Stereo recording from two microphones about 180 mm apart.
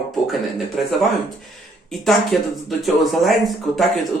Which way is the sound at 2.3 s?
Centre (ahead or behind).